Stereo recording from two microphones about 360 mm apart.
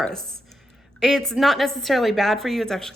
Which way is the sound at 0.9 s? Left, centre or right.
Centre.